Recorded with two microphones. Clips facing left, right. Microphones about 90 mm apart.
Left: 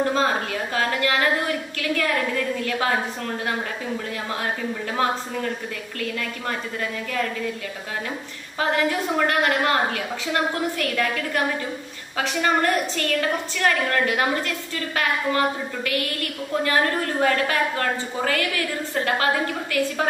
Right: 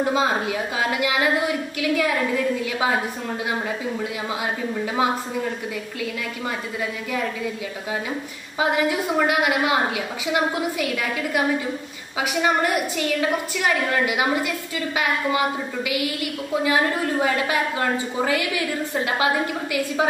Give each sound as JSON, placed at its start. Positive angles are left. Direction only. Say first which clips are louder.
{"t": 0.0, "sound": "a woman's voice", "louder": "right 1 dB", "side_deg": -10}
{"t": 4.9, "sound": "a woman's voice", "louder": "right 1 dB", "side_deg": -10}
{"t": 8.5, "sound": "a woman's voice", "louder": "right 1 dB", "side_deg": -10}